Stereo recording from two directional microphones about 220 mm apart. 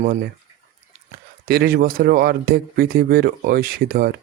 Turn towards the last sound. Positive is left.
turn(degrees=-40)  # may be behind; listen again after turning